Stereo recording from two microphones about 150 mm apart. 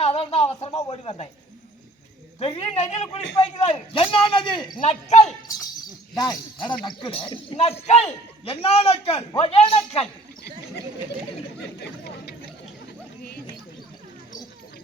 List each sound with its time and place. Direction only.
0.0 s a sound: 40° left (ahead or behind)
0.9 s a man's voice: 40° left (ahead or behind)
2.4 s a man's voice: 40° left (ahead or behind)
4.8 s a man's voice: 50° left (ahead or behind)
6.1 s a man's voice: 30° left (ahead or behind)